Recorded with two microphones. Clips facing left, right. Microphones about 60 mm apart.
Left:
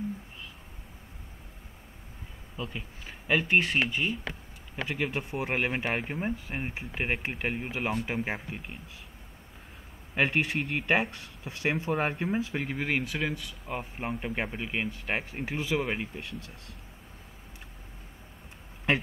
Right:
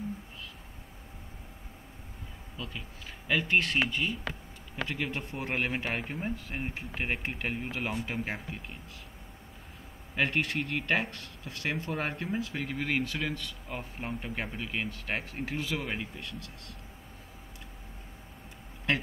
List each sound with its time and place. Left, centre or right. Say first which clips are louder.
2.5 s speech: left 4 dB; left
10.1 s speech: left 2 dB; centre